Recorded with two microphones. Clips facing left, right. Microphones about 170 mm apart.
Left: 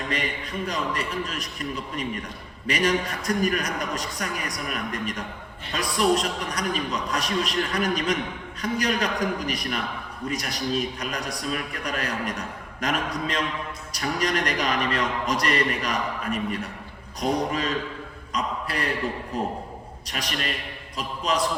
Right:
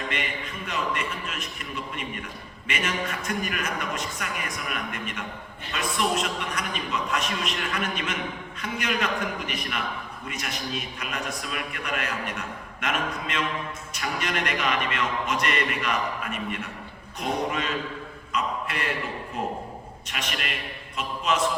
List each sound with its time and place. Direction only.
0.1 s a man's voice: 35° left (ahead or behind)
20.1 s a man's voice: 35° left (ahead or behind)